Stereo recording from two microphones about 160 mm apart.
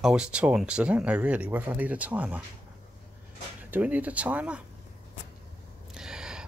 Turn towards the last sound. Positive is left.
turn(degrees=-5)  # may be behind; listen again after turning